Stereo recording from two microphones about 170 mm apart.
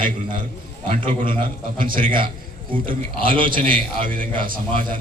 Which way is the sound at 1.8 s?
55° right (ahead or behind).